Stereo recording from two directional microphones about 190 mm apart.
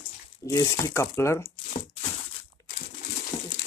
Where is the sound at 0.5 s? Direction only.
15° left (ahead or behind).